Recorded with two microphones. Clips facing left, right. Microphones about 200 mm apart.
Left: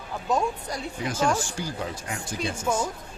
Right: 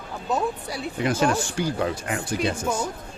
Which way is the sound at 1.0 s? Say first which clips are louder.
Right 3 dB; 65° right (ahead or behind).